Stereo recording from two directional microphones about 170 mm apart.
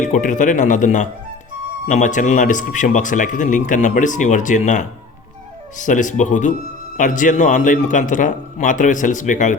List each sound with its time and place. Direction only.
0.0 s speech: 50° left (ahead or behind)